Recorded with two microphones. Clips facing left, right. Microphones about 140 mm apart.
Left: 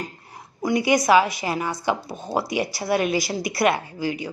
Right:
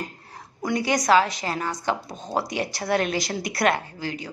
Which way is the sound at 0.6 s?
10° left (ahead or behind).